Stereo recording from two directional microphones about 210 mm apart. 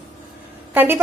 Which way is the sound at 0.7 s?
10° right (ahead or behind).